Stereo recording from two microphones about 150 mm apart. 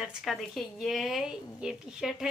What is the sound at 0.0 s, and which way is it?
A woman's voice, centre (ahead or behind).